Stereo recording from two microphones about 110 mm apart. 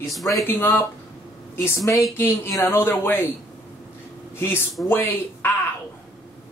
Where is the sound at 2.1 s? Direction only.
20° left (ahead or behind).